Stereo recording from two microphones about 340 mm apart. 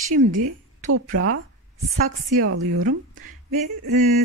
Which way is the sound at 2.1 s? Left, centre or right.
Right.